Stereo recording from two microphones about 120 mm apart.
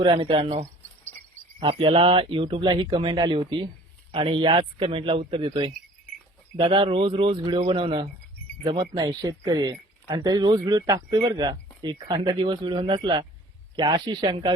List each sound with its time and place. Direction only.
0.0 s speech: 45° right (ahead or behind)
1.6 s speech: 45° right (ahead or behind)
6.7 s speech: 45° right (ahead or behind)
9.0 s speech: 30° right (ahead or behind)